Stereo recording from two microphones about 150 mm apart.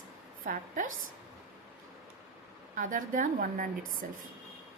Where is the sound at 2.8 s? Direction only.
60° right (ahead or behind).